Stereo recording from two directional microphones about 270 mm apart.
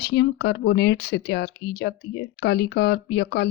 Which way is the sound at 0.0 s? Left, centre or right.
Left.